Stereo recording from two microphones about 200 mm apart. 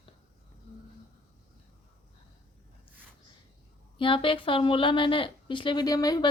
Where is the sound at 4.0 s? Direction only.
25° left (ahead or behind).